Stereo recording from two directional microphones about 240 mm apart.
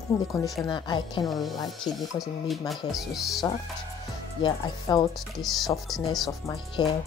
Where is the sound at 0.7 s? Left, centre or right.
Centre.